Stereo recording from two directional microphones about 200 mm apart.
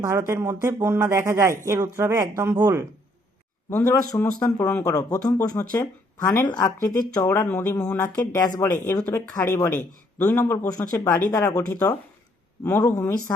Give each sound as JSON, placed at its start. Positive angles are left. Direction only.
{"t": 0.0, "sound": "speech", "side_deg": -15}
{"t": 3.7, "sound": "speech", "side_deg": 10}
{"t": 12.6, "sound": "speech", "side_deg": 15}